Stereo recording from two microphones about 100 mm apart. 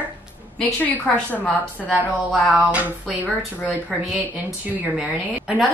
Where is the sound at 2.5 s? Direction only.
15° right (ahead or behind).